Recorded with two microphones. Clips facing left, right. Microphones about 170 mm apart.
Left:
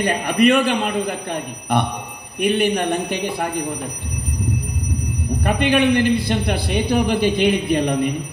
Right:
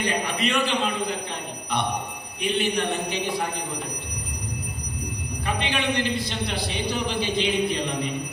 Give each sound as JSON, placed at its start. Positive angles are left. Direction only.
{"t": 0.0, "sound": "a man's voice", "side_deg": 55}
{"t": 5.4, "sound": "a man's voice", "side_deg": 55}